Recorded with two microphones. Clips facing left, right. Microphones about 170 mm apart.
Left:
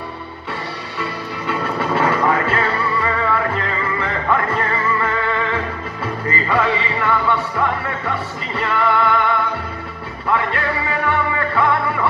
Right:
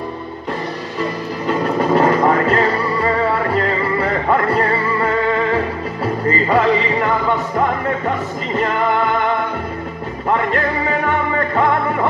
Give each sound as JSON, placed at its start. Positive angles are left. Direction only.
{"t": 1.5, "sound": "music", "side_deg": -40}